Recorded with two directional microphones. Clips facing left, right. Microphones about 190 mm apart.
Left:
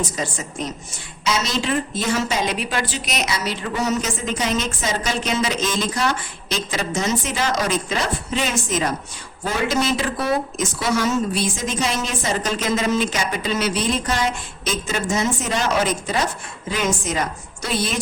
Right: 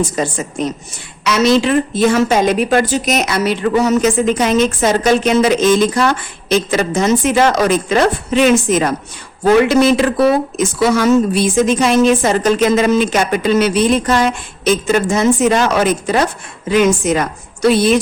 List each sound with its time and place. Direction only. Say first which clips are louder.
0.2 s speech: right 8 dB; 60° right (ahead or behind)